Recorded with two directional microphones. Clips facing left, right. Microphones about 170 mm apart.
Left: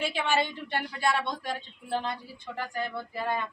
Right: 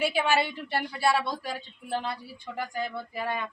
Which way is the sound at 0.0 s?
10° right (ahead or behind).